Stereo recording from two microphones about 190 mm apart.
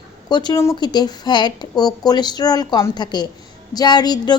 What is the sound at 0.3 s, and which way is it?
A woman's voice, 25° left (ahead or behind).